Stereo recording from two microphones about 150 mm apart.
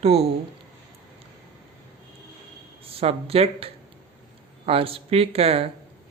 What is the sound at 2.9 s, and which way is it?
Speech, 40° right (ahead or behind).